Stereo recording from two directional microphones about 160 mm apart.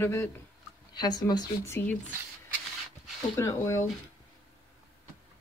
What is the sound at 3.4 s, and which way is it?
Speech, 20° left (ahead or behind).